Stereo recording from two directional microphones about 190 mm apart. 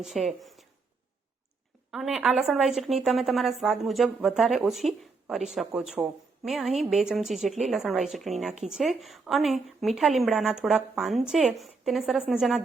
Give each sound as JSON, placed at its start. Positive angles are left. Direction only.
{"t": 0.0, "sound": "a woman's voice", "side_deg": 0}
{"t": 1.9, "sound": "a woman's voice", "side_deg": -5}